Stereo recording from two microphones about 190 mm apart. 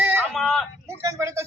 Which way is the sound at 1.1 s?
15° right (ahead or behind).